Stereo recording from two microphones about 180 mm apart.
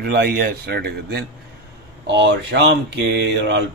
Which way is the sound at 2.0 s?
75° right (ahead or behind).